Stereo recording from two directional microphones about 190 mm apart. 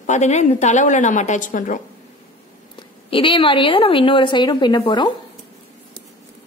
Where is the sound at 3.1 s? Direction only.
25° left (ahead or behind).